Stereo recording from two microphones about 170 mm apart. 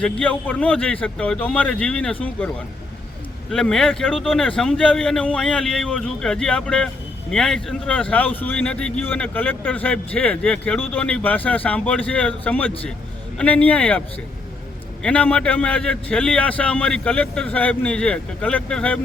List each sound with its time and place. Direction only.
0.0 s a man's voice: 5° left (ahead or behind)
3.5 s a man's voice: centre (ahead or behind)
15.0 s a man's voice: 10° left (ahead or behind)